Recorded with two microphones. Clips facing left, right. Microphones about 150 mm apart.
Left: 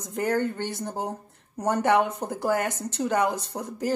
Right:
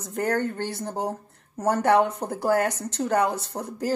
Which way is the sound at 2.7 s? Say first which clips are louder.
Right 1 dB; 15° left (ahead or behind).